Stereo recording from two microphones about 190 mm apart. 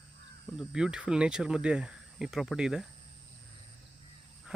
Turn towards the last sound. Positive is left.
turn(degrees=-5)  # may be behind; listen again after turning